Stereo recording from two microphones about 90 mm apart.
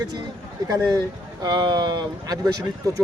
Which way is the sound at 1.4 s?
50° right (ahead or behind).